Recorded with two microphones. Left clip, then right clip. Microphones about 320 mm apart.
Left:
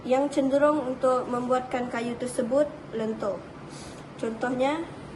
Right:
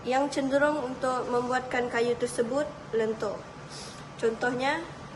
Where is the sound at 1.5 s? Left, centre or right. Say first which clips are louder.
Right 1 dB; right.